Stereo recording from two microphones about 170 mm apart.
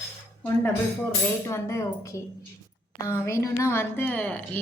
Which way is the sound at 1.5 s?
15° left (ahead or behind).